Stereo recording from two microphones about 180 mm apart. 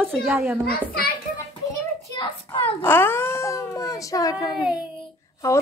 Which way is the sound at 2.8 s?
10° left (ahead or behind).